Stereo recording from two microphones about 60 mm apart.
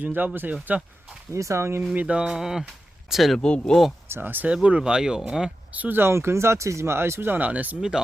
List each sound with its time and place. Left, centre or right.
0.0 s speech: right
1.3 s speech: right
2.0 s speech: centre
3.3 s speech: centre
4.1 s speech: right
4.5 s speech: centre
5.7 s speech: right
6.0 s speech: right
7.3 s speech: right
7.8 s speech: centre